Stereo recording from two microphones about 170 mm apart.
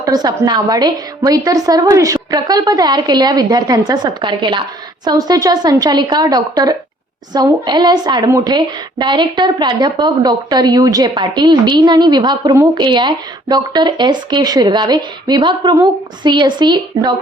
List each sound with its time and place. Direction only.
0.0 s a woman's voice: 25° right (ahead or behind)